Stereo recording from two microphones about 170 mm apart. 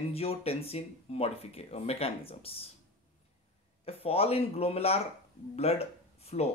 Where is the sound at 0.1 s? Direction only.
35° left (ahead or behind).